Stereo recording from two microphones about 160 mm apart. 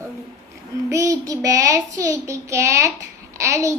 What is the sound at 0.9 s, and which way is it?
A child's voice, 20° right (ahead or behind).